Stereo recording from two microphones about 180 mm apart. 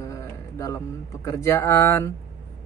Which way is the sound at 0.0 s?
15° left (ahead or behind).